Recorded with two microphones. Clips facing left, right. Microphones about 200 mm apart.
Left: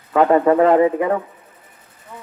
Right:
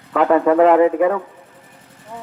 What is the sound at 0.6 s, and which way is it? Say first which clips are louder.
Speech: right 2 dB; 75° right (ahead or behind).